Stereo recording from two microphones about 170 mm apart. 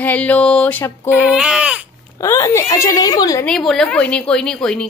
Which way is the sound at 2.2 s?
15° left (ahead or behind).